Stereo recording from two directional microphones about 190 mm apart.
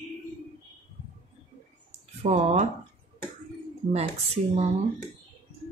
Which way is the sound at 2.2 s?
35° right (ahead or behind).